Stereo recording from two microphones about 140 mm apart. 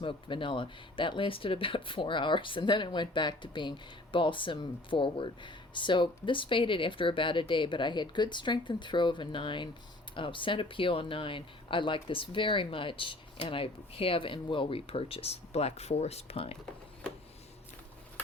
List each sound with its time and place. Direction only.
0.0 s speech: 35° left (ahead or behind)